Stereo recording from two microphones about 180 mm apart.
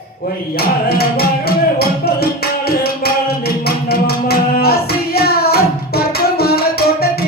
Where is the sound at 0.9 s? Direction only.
60° left (ahead or behind).